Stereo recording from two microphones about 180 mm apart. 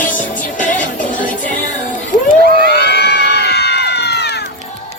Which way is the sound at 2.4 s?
55° right (ahead or behind).